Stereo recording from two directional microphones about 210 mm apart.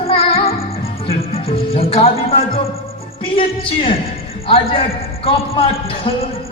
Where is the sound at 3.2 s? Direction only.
25° left (ahead or behind).